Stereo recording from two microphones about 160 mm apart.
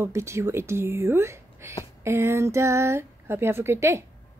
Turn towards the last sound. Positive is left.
turn(degrees=-15)  # may be behind; listen again after turning